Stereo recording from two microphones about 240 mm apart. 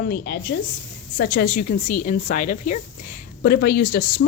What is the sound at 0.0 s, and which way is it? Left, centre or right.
A woman's voice, left.